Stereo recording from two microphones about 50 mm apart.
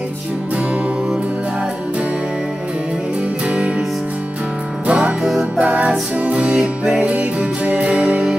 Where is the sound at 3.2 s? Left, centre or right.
Right.